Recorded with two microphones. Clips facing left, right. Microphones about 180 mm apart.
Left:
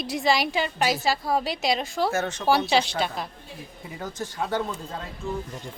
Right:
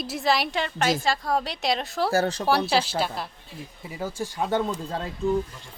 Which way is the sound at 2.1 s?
35° right (ahead or behind).